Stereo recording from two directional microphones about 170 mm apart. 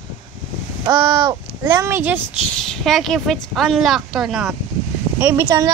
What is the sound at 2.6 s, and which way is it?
A woman's voice, centre (ahead or behind).